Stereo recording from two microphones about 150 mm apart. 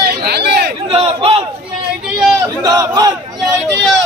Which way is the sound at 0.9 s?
40° right (ahead or behind).